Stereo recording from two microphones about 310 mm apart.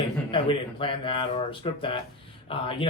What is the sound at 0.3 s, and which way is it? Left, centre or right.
Speech, centre.